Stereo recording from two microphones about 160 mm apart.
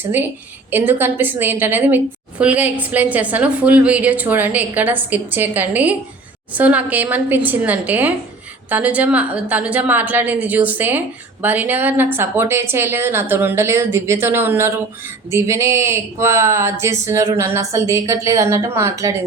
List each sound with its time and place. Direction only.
0.7 s a woman's voice: 10° right (ahead or behind)